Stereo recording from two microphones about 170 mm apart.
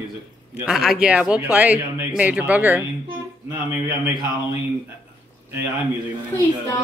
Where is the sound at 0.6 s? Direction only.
Centre (ahead or behind).